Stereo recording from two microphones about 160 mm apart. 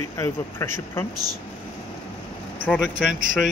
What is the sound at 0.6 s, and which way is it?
Speech, 15° left (ahead or behind).